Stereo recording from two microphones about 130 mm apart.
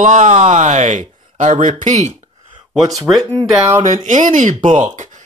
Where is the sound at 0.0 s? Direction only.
70° right (ahead or behind).